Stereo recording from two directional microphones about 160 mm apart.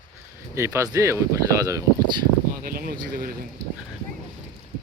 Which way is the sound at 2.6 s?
65° right (ahead or behind).